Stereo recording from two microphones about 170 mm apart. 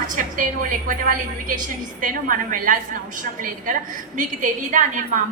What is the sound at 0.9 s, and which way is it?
A woman's voice, 55° right (ahead or behind).